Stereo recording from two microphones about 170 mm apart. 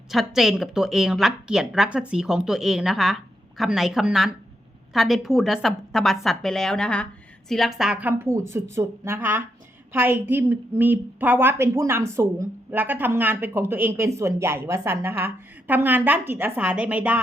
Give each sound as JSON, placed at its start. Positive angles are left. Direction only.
{"t": 0.1, "sound": "a woman's voice", "side_deg": 0}